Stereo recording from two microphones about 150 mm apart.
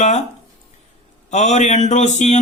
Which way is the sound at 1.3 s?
50° left (ahead or behind).